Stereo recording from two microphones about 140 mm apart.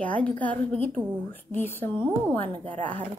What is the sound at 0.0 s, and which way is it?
A woman's voice, 10° left (ahead or behind).